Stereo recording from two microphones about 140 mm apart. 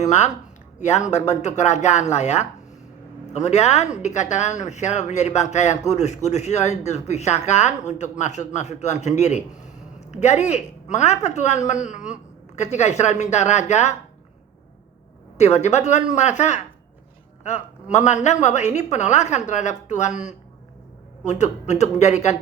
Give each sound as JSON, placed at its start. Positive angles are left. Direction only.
{"t": 0.0, "sound": "speech", "side_deg": 55}
{"t": 15.4, "sound": "speech", "side_deg": 50}
{"t": 17.9, "sound": "speech", "side_deg": 55}